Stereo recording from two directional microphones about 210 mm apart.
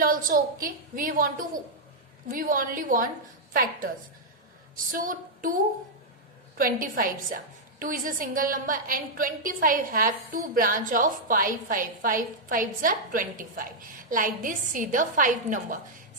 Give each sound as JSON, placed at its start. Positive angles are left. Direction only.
{"t": 0.0, "sound": "a woman's voice", "side_deg": -45}
{"t": 6.6, "sound": "a woman's voice", "side_deg": -40}